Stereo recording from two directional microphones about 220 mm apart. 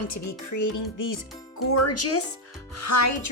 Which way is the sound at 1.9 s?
90° left.